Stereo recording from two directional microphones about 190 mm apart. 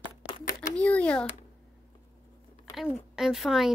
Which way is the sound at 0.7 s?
5° left (ahead or behind).